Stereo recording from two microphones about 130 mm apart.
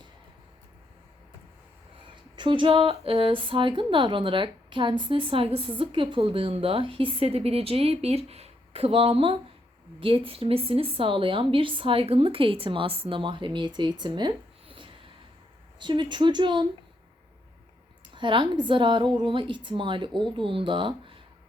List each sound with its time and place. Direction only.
2.3 s a woman's voice: 40° right (ahead or behind)
18.1 s a woman's voice: 40° right (ahead or behind)